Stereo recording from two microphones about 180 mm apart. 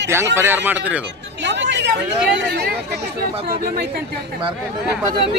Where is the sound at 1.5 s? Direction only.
75° right (ahead or behind).